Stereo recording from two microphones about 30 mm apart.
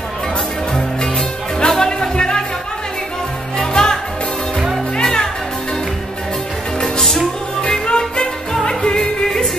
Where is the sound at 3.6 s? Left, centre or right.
Left.